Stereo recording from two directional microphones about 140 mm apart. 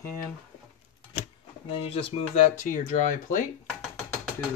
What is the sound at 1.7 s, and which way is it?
Speech, 45° left (ahead or behind).